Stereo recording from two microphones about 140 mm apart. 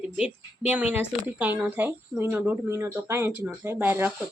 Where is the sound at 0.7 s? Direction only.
10° right (ahead or behind).